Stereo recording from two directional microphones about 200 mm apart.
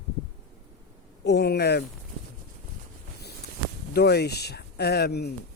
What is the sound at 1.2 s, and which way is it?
Speech, 55° left (ahead or behind).